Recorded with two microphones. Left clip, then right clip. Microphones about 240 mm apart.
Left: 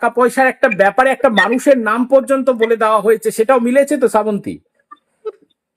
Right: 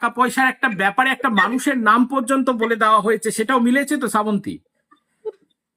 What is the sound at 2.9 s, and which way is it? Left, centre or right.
Speech, left.